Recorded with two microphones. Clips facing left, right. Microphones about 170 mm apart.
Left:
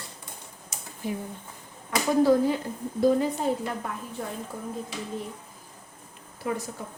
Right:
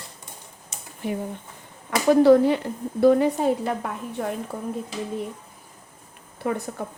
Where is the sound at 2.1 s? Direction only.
70° right (ahead or behind).